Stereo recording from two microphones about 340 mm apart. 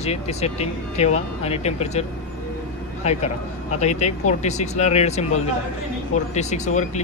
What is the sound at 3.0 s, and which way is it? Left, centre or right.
Speech, centre.